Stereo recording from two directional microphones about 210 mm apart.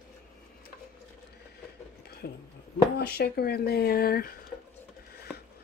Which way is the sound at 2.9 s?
50° left (ahead or behind).